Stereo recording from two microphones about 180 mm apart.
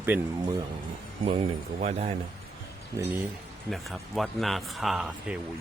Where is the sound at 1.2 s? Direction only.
35° right (ahead or behind).